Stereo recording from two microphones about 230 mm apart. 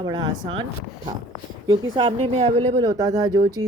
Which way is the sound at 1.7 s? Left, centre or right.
Right.